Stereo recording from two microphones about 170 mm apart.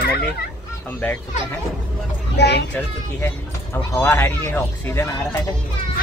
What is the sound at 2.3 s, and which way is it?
Speech, 80° left.